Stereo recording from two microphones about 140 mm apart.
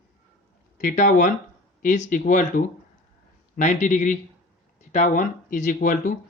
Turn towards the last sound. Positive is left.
turn(degrees=75)  # may be behind; listen again after turning